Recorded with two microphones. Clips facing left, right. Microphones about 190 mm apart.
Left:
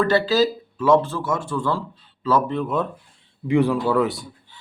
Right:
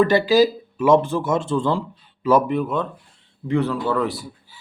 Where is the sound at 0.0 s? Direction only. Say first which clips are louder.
Right 3 dB; 15° right (ahead or behind).